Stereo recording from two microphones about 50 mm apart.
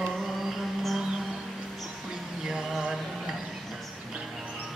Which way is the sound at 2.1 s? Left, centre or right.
Centre.